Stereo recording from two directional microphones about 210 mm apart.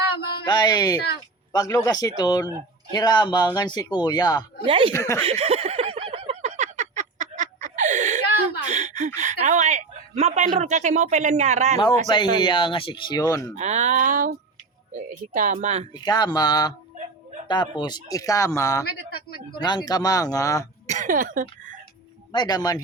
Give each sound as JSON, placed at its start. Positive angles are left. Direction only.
{"t": 0.4, "sound": "a man's voice", "side_deg": 20}
{"t": 4.6, "sound": "speech", "side_deg": -25}
{"t": 4.9, "sound": "a man's voice", "side_deg": 15}
{"t": 5.2, "sound": "a sound", "side_deg": -30}
{"t": 12.1, "sound": "a man's voice", "side_deg": 20}
{"t": 13.6, "sound": "speech", "side_deg": -35}
{"t": 16.0, "sound": "a man's voice", "side_deg": 20}
{"t": 20.8, "sound": "speech", "side_deg": -35}
{"t": 22.3, "sound": "a man's voice", "side_deg": 20}